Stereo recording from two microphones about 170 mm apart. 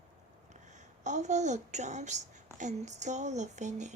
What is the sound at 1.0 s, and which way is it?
A woman's voice, 45° right (ahead or behind).